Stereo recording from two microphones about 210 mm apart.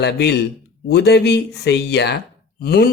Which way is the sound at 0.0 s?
50° left (ahead or behind).